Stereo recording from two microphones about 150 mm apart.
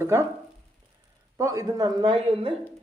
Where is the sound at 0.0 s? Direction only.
20° right (ahead or behind).